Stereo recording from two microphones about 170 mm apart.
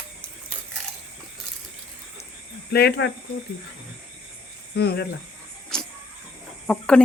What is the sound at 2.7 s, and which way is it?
Speech, 70° left (ahead or behind).